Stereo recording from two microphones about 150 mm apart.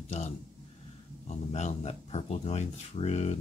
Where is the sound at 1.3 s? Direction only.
50° left (ahead or behind).